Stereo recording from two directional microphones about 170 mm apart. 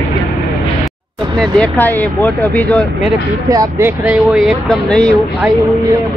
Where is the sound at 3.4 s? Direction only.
20° right (ahead or behind).